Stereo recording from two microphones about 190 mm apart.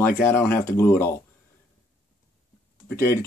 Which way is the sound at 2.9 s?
15° left (ahead or behind).